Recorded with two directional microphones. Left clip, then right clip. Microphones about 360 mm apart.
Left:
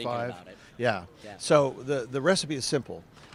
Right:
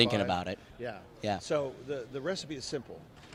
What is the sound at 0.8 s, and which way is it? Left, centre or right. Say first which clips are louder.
Speech: left 11 dB; left.